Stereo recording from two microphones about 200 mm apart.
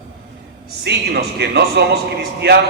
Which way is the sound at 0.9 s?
60° right (ahead or behind).